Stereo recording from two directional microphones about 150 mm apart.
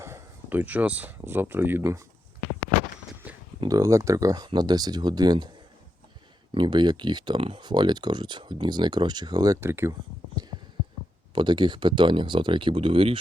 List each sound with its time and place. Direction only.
0.0 s speech: 15° right (ahead or behind)
3.2 s a sound: 10° right (ahead or behind)
3.6 s speech: 20° right (ahead or behind)
6.5 s speech: 30° right (ahead or behind); by 9.9 s 15° right (ahead or behind)
11.3 s speech: 30° right (ahead or behind)